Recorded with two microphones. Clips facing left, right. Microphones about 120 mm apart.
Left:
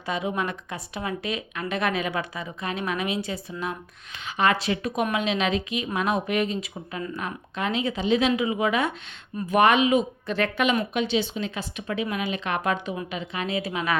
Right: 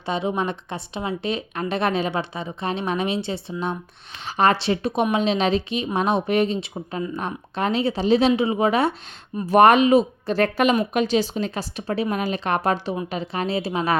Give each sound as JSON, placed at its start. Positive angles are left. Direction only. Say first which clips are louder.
{"t": 0.0, "sound": "speech", "louder": "right 4 dB", "side_deg": -25}